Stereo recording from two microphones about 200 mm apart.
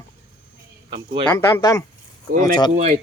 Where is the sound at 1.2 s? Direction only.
10° left (ahead or behind).